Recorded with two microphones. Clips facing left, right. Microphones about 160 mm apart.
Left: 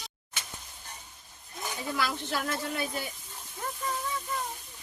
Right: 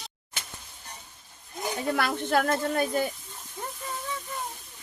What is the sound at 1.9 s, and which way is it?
Speech, 55° right (ahead or behind).